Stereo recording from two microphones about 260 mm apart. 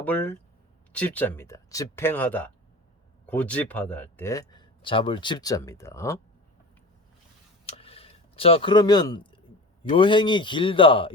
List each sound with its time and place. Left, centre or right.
0.0 s speech: centre
7.6 s a sound: left
9.9 s speech: centre